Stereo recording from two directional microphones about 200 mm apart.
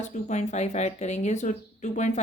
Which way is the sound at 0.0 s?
35° left (ahead or behind).